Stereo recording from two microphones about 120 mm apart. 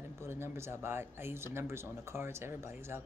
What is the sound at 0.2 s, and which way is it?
A woman's voice, 20° right (ahead or behind).